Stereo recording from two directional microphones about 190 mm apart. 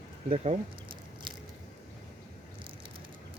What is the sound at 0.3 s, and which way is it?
Speech, 35° right (ahead or behind).